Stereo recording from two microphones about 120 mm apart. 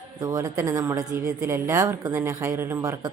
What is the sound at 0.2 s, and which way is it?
A woman's voice, 30° right (ahead or behind).